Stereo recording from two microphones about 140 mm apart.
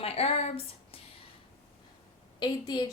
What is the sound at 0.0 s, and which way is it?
Speech, 45° left (ahead or behind).